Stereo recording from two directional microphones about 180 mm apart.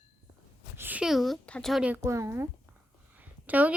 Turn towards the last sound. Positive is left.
turn(degrees=-10)  # may be behind; listen again after turning